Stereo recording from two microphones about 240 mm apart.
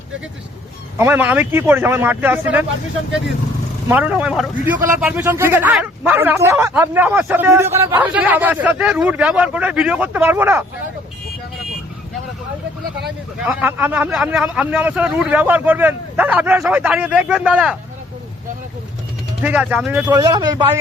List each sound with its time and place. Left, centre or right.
0.9 s a man's voice: centre
3.8 s a man's voice: centre
13.4 s speech: centre
19.4 s speech: centre
20.1 s a man's voice: centre